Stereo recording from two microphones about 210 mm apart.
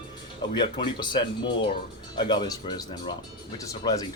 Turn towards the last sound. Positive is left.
turn(degrees=20)  # may be behind; listen again after turning